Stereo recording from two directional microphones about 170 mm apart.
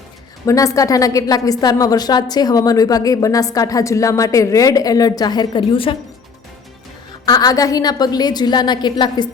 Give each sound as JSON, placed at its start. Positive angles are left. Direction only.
{"t": 0.4, "sound": "a woman's voice", "side_deg": 20}
{"t": 7.3, "sound": "a woman's voice", "side_deg": 20}